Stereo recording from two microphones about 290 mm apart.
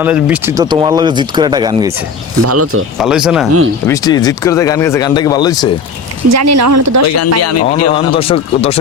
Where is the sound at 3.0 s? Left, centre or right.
Centre.